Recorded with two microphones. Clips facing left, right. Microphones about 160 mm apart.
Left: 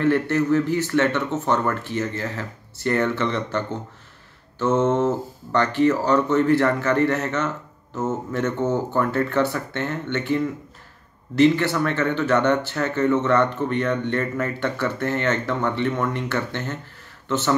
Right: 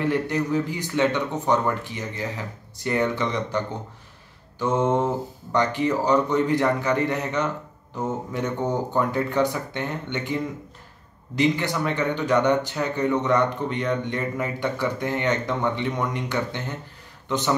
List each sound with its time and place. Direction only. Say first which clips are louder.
0.0 s speech: left 4 dB; 15° right (ahead or behind)